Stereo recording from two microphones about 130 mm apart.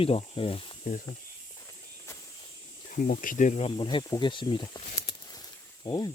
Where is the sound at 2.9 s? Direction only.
85° left.